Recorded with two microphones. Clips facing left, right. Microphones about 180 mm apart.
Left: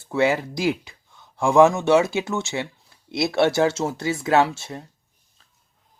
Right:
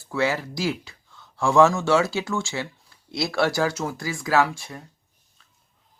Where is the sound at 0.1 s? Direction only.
20° left (ahead or behind).